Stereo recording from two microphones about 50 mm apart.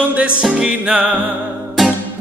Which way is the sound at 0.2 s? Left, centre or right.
Right.